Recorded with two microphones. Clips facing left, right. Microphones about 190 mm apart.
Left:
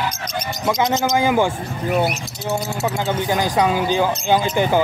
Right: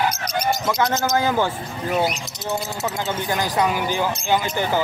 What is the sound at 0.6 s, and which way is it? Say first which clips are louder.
Speech: left 2 dB; 15° left (ahead or behind).